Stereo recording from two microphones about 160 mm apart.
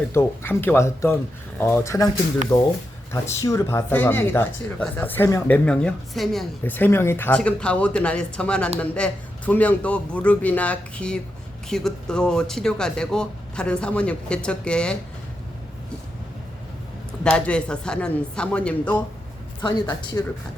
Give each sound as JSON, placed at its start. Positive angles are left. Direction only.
{"t": 0.1, "sound": "speech", "side_deg": 15}
{"t": 17.2, "sound": "speech", "side_deg": 5}
{"t": 19.9, "sound": "speech", "side_deg": 25}